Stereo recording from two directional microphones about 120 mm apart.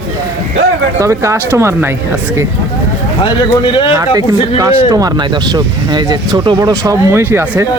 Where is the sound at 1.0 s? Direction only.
25° right (ahead or behind).